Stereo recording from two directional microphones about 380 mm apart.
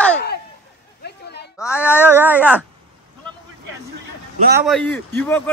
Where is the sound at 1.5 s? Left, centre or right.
Centre.